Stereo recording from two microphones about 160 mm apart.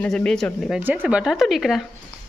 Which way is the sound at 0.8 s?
10° right (ahead or behind).